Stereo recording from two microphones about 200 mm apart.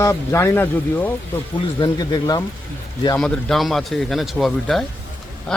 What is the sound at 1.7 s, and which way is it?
Speech, 20° left (ahead or behind).